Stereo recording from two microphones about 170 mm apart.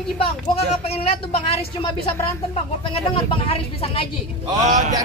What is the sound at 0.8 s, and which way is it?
Speech, 35° left (ahead or behind).